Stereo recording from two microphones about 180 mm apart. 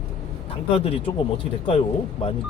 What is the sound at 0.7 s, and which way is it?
Speech, 35° left (ahead or behind).